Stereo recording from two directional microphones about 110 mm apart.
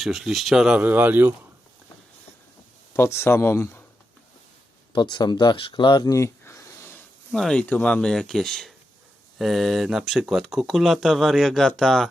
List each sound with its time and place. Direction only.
0.0 s speech: centre (ahead or behind)
0.8 s speech: 15° right (ahead or behind)
2.9 s speech: 25° left (ahead or behind)
4.9 s speech: 45° left (ahead or behind); by 7.0 s 25° left (ahead or behind)
7.3 s speech: 5° left (ahead or behind)